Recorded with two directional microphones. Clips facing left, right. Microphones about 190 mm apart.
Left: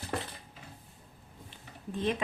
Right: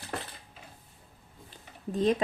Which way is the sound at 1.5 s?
40° right (ahead or behind).